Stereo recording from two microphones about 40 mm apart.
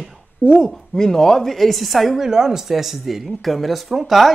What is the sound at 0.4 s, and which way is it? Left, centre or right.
Speech, left.